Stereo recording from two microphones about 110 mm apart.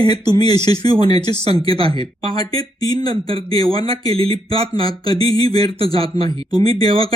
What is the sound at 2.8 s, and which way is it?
Speech, 35° left (ahead or behind).